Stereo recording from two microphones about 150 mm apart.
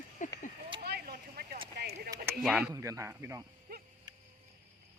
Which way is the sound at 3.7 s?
80° right.